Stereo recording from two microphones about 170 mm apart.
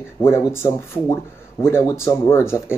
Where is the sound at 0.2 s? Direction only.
15° left (ahead or behind).